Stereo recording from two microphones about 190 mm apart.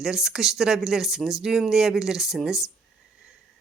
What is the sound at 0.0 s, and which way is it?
Speech, centre (ahead or behind).